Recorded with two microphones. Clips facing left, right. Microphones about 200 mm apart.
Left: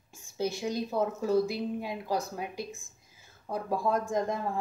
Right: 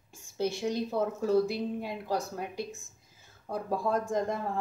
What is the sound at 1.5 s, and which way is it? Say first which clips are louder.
A woman's voice: even; 5° left (ahead or behind).